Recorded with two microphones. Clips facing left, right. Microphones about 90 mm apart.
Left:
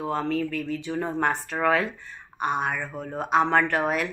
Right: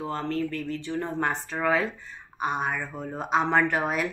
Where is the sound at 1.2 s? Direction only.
Centre (ahead or behind).